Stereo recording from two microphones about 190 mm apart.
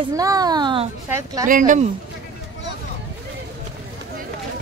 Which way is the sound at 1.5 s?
40° right (ahead or behind).